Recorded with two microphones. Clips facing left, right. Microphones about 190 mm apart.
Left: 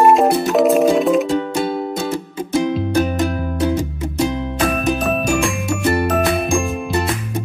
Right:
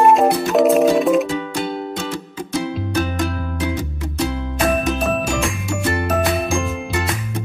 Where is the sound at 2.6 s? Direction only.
20° left (ahead or behind).